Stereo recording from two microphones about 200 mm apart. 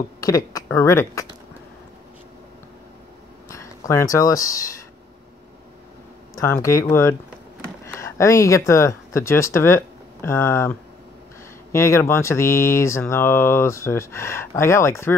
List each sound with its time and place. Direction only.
0.5 s speech: 15° left (ahead or behind)
3.4 s speech: 15° left (ahead or behind)
6.3 s speech: 15° left (ahead or behind)